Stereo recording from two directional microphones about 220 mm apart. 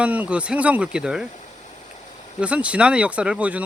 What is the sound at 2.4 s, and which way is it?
Speech, 5° right (ahead or behind).